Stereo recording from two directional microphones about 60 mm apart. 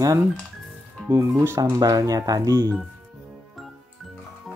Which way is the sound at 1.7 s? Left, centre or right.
Right.